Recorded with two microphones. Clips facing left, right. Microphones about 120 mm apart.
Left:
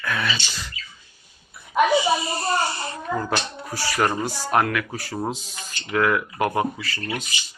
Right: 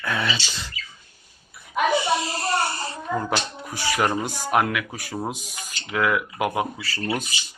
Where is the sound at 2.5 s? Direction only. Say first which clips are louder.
Left 1 dB; 60° right (ahead or behind).